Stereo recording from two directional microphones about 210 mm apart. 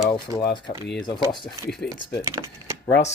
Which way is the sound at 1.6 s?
Centre (ahead or behind).